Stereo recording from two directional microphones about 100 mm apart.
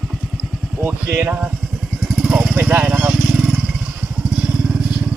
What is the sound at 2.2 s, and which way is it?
Vehicle, 10° right (ahead or behind).